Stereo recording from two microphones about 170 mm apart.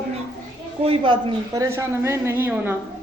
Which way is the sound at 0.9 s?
30° right (ahead or behind).